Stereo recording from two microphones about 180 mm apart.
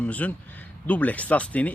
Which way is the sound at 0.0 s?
10° left (ahead or behind).